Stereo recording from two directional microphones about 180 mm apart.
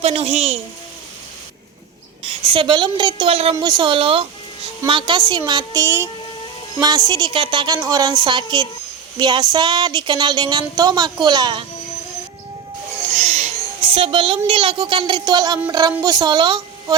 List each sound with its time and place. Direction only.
0.0 s a woman's voice: 35° right (ahead or behind)
2.2 s a woman's voice: 25° right (ahead or behind)
3.5 s speech: 20° right (ahead or behind)
13.2 s a woman's voice: 40° right (ahead or behind)